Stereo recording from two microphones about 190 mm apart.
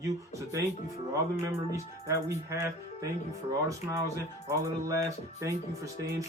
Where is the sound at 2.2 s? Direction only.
15° right (ahead or behind).